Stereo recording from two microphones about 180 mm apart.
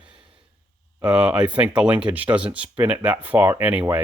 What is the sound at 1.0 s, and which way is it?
Speech, 5° right (ahead or behind).